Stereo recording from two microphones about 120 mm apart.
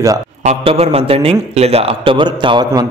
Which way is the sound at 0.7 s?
55° right (ahead or behind).